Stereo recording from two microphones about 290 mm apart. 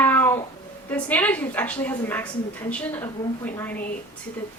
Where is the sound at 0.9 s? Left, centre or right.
Centre.